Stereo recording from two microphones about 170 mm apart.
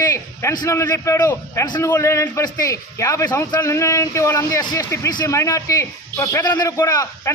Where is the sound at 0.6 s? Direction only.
20° left (ahead or behind).